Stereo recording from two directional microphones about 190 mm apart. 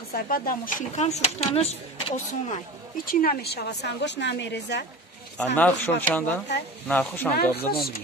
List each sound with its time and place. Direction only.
0.1 s speech: 50° left (ahead or behind); by 2.6 s 35° left (ahead or behind)
3.1 s a woman's voice: 50° left (ahead or behind); by 4.8 s 65° left (ahead or behind)
5.6 s speech: 10° left (ahead or behind)